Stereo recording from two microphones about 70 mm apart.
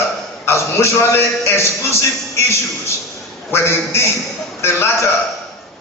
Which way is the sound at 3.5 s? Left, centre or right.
Left.